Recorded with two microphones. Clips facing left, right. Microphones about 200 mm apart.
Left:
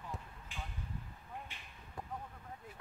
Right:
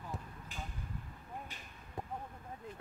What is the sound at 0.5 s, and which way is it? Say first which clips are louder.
Vehicle: right 1 dB; 40° right (ahead or behind).